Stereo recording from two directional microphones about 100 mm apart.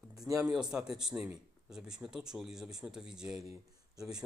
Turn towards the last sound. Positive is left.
turn(degrees=-5)  # may be behind; listen again after turning